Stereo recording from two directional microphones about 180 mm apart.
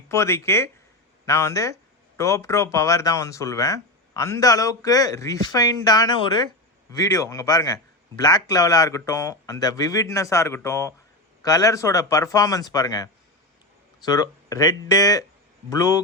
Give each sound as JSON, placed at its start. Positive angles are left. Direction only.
{"t": 0.1, "sound": "speech", "side_deg": 15}